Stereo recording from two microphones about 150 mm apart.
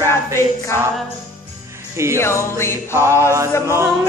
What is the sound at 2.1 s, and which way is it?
Music, 15° left (ahead or behind).